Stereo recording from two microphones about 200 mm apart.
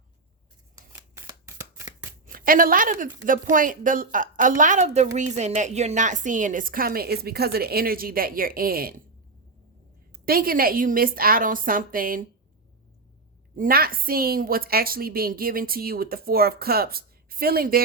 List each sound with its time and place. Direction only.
2.2 s a woman's voice: 45° right (ahead or behind)
10.1 s a woman's voice: 45° right (ahead or behind)
13.6 s a woman's voice: 45° right (ahead or behind)